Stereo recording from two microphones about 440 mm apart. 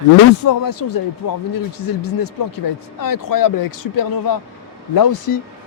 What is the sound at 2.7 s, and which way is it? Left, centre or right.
Speech, left.